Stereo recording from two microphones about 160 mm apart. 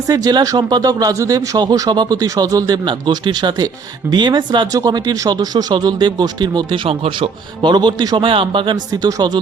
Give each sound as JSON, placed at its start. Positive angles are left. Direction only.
{"t": 0.1, "sound": "speech", "side_deg": -25}